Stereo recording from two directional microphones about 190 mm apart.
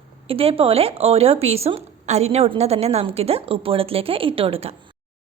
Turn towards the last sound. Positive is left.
turn(degrees=-30)  # may be behind; listen again after turning